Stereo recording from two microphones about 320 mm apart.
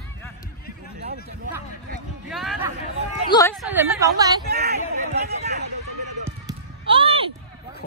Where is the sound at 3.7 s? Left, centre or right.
Centre.